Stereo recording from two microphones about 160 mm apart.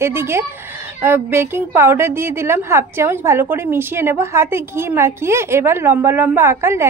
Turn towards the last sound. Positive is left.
turn(degrees=-15)  # may be behind; listen again after turning